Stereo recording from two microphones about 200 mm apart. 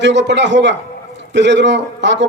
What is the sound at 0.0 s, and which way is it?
A man's voice, 65° right (ahead or behind).